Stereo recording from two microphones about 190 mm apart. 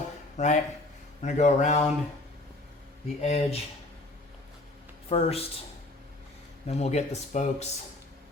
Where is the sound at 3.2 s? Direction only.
35° left (ahead or behind).